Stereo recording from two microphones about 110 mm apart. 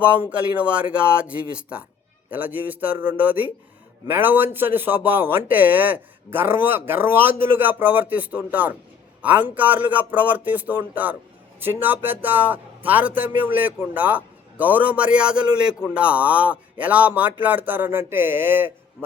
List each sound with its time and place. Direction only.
0.0 s a man's voice: 15° right (ahead or behind)